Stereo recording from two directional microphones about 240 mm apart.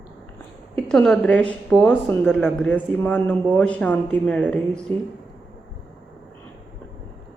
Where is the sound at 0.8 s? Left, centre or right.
Centre.